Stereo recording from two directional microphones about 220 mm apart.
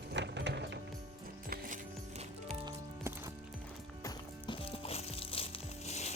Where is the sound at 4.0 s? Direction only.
20° left (ahead or behind).